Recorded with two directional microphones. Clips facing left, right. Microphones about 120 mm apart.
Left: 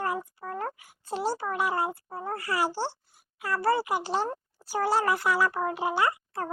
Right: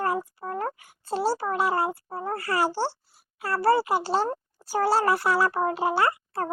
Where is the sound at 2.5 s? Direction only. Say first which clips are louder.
Right 3 dB; 45° right (ahead or behind).